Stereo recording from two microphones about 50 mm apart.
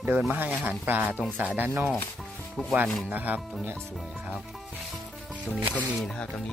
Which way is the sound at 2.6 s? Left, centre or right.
Centre.